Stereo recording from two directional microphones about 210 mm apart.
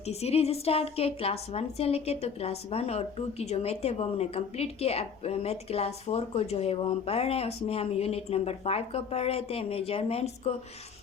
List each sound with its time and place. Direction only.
0.0 s a woman's voice: 30° left (ahead or behind)